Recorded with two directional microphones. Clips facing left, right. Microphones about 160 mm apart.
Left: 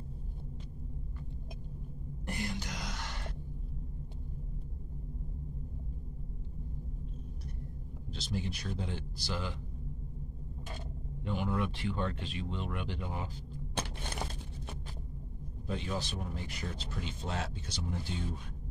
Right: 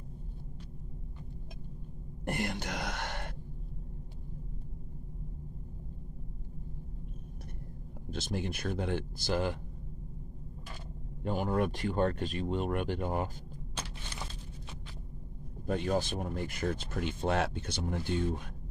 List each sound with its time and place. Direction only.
2.2 s speech: 60° right (ahead or behind)
8.1 s speech: 55° right (ahead or behind)
11.2 s speech: 45° right (ahead or behind)
13.7 s a sound: 55° left (ahead or behind)
15.6 s speech: 55° right (ahead or behind)